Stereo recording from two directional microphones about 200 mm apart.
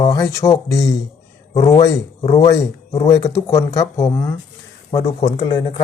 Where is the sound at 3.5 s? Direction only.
15° left (ahead or behind).